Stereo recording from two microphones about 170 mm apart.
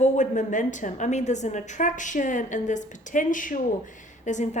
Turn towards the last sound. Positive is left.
turn(degrees=45)  # may be behind; listen again after turning